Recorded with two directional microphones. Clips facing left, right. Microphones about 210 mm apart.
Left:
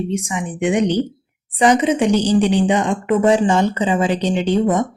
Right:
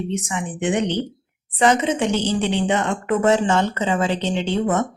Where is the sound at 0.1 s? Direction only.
10° left (ahead or behind).